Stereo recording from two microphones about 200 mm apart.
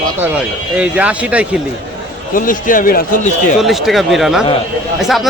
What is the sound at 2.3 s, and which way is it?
Speech, 45° left (ahead or behind).